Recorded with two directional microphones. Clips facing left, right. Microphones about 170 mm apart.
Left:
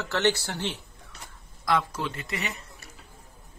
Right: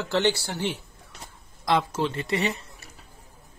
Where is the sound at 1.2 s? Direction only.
25° right (ahead or behind).